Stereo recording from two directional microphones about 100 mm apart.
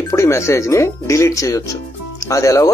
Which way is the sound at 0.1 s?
30° left (ahead or behind).